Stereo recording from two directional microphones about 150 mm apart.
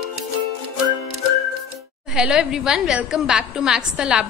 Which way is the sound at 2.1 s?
5° right (ahead or behind).